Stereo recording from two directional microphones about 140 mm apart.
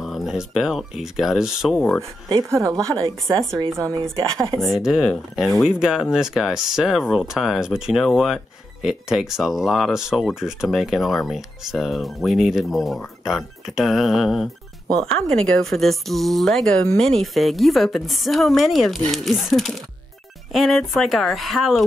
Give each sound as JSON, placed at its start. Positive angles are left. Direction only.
{"t": 0.0, "sound": "speech", "side_deg": 0}
{"t": 2.2, "sound": "a woman's voice", "side_deg": -25}
{"t": 4.6, "sound": "speech", "side_deg": 0}